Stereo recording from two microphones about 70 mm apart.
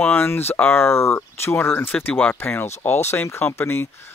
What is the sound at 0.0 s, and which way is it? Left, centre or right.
Speech, left.